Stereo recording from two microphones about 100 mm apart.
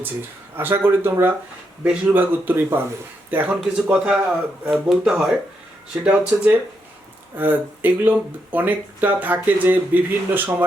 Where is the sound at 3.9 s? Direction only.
5° right (ahead or behind).